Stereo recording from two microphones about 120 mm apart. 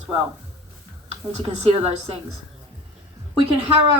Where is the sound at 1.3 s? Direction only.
65° right (ahead or behind).